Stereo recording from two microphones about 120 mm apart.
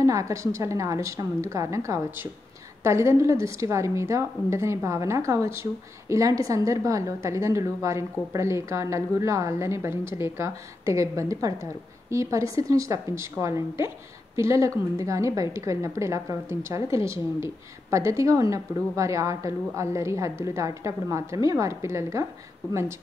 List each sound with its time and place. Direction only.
0.0 s a woman's voice: 25° right (ahead or behind)